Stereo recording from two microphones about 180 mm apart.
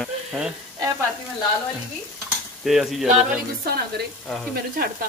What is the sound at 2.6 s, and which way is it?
Speech, centre (ahead or behind).